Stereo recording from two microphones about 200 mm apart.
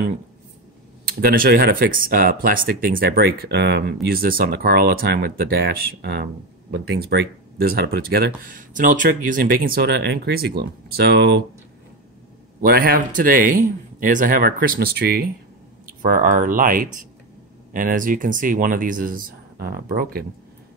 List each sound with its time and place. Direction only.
1.0 s speech: 45° right (ahead or behind)
12.6 s speech: 50° right (ahead or behind)